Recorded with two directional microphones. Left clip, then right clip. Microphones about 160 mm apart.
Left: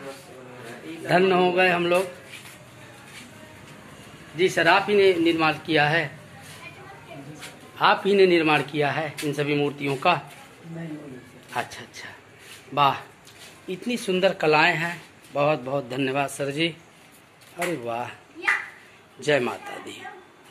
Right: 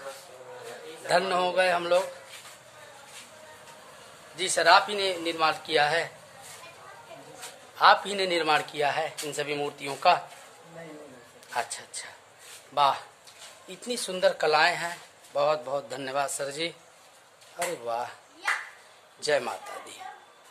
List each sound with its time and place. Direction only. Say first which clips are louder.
1.0 s speech: left 5 dB; 15° right (ahead or behind)
4.4 s speech: left 1 dB; 10° right (ahead or behind)
7.7 s speech: left 1 dB; 10° right (ahead or behind)
12.7 s speech: left 3 dB; 15° right (ahead or behind)
14.0 s speech: left 3 dB; 15° right (ahead or behind)
17.8 s speech: left 2 dB; 15° right (ahead or behind)
19.2 s speech: left 4 dB; 10° right (ahead or behind)